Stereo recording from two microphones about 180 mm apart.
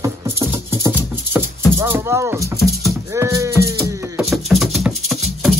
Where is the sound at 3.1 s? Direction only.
15° right (ahead or behind).